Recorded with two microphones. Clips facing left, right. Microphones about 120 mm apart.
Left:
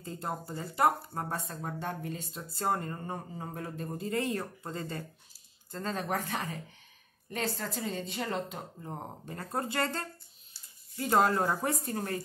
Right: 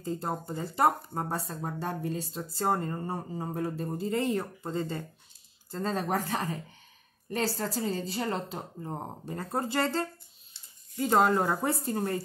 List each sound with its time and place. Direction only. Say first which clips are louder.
0.0 s speech: right 4 dB; 30° right (ahead or behind)